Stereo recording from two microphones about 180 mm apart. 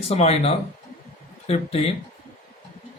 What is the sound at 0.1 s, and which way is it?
Speech, 35° left (ahead or behind).